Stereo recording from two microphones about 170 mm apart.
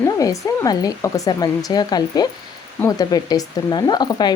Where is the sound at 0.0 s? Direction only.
20° left (ahead or behind).